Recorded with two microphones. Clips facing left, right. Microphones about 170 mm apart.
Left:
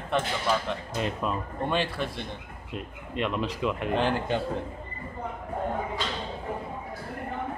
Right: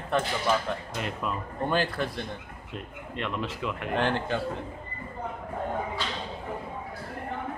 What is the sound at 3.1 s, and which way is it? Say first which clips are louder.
Speech: left 4 dB; 20° left (ahead or behind).